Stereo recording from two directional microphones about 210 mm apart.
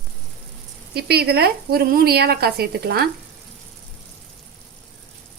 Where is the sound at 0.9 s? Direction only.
50° right (ahead or behind).